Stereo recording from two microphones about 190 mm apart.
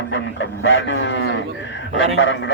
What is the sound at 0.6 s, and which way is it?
Speech, 70° left (ahead or behind).